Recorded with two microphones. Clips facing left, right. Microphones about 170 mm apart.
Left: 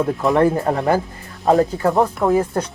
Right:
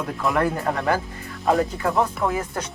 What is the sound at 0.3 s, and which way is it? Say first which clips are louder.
Speech: left 6 dB; 25° left (ahead or behind).